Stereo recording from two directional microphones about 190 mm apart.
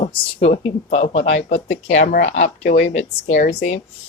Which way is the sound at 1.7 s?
45° left (ahead or behind).